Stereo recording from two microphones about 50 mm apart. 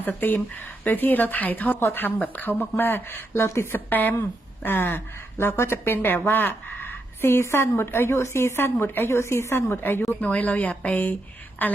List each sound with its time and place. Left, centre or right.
0.2 s speech: left
3.8 s a woman's voice: left
8.1 s a woman's voice: left
9.0 s a woman's voice: left
9.7 s speech: left